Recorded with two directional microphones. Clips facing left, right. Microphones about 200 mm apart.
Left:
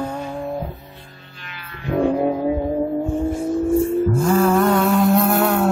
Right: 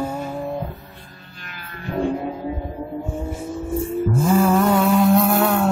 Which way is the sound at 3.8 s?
Centre (ahead or behind).